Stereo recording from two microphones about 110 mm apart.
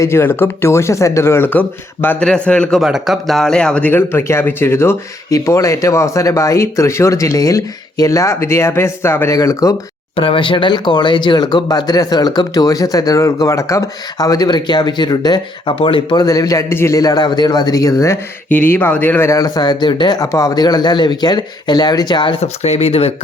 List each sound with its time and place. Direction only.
0.0 s speech: 20° left (ahead or behind)
2.8 s speech: 5° right (ahead or behind); by 9.7 s 30° left (ahead or behind)
10.2 s speech: 55° left (ahead or behind); by 15.7 s 40° left (ahead or behind)
15.8 s speech: 50° left (ahead or behind)
16.2 s speech: 35° left (ahead or behind)
18.4 s speech: 15° left (ahead or behind)
19.3 s speech: 35° left (ahead or behind)
22.4 s speech: 80° left